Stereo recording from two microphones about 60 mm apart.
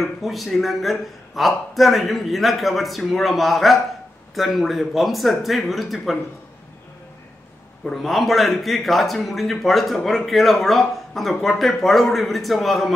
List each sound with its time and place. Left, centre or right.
0.0 s a man's voice: centre
7.8 s a man's voice: centre